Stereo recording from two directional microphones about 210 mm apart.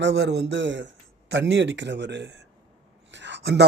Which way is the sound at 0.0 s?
55° right (ahead or behind).